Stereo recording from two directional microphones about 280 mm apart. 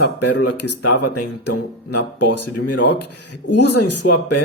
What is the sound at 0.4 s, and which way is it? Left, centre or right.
Speech, left.